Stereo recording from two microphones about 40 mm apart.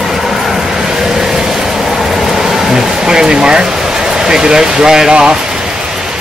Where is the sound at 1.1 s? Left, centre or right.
Centre.